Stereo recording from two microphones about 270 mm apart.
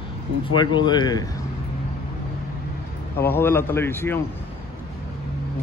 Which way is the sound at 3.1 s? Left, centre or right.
Centre.